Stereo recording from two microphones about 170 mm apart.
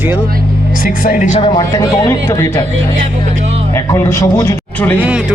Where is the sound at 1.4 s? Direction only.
25° left (ahead or behind).